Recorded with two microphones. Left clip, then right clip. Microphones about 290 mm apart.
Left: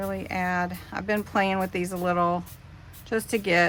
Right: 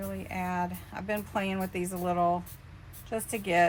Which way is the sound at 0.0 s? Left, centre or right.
Left.